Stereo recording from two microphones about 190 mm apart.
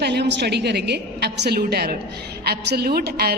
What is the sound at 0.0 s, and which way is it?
A woman's voice, 60° right (ahead or behind).